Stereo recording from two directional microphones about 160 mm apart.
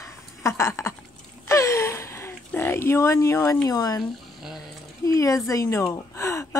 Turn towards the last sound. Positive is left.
turn(degrees=20)  # may be behind; listen again after turning